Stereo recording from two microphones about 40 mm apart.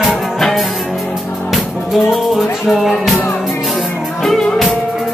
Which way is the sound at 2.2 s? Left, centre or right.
Centre.